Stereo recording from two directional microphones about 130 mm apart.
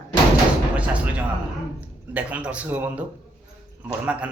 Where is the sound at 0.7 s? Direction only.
10° right (ahead or behind).